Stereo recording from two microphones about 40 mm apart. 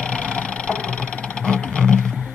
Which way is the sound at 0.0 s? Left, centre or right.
Left.